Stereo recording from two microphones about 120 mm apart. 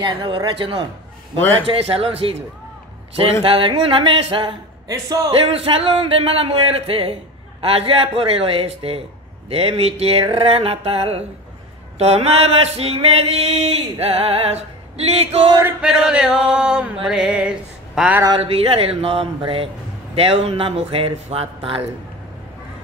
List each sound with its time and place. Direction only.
0.0 s speech: 40° right (ahead or behind)
3.4 s speech: 50° right (ahead or behind)
4.8 s speech: 30° right (ahead or behind)
5.3 s speech: 55° right (ahead or behind)
9.5 s a sound: 55° right (ahead or behind)
15.9 s chant: 5° right (ahead or behind)
18.4 s speech: 55° right (ahead or behind)